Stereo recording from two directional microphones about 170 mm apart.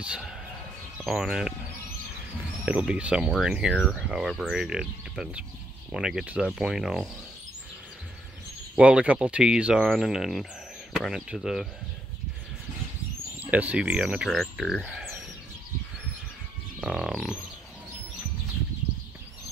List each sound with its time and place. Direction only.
0.0 s speech: 5° right (ahead or behind)
2.6 s speech: 5° right (ahead or behind)
8.7 s speech: 5° right (ahead or behind)
13.5 s speech: 10° right (ahead or behind)
16.8 s speech: centre (ahead or behind)